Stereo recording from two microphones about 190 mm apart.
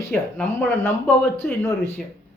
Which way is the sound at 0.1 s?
5° left (ahead or behind).